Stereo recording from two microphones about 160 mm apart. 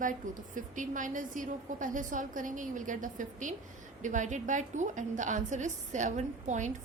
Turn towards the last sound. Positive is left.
turn(degrees=-50)  # may be behind; listen again after turning